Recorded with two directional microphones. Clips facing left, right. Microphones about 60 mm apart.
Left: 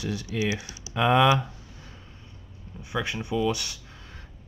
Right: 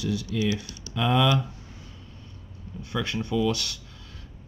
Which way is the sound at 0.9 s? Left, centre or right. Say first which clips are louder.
Left 3 dB; left.